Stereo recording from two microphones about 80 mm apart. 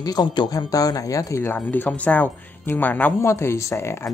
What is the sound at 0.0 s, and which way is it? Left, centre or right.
Speech, left.